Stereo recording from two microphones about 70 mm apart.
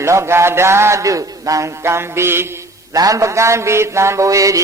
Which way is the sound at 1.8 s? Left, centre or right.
Right.